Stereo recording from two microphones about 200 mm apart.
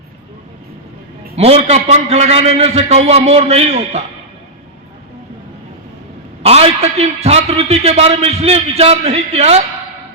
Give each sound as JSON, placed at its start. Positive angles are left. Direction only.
{"t": 1.4, "sound": "a man's voice", "side_deg": -30}
{"t": 6.4, "sound": "a man's voice", "side_deg": -30}